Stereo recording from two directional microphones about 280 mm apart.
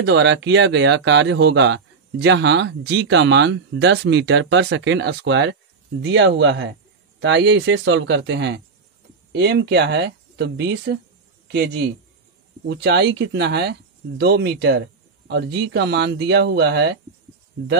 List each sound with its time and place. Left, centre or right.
0.0 s a man's voice: right